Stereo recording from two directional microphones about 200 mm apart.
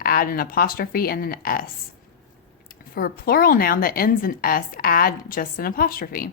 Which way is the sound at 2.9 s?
50° left (ahead or behind).